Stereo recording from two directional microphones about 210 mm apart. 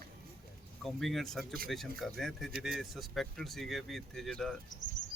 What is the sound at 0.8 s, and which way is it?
Speech, centre (ahead or behind).